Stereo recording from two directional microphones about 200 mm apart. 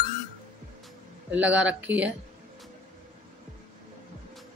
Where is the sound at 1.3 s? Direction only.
5° right (ahead or behind).